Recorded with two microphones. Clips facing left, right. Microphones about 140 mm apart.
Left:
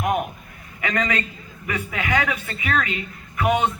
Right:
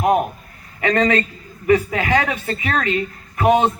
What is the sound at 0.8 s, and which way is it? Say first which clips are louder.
A woman's voice: right 7 dB; 35° right (ahead or behind).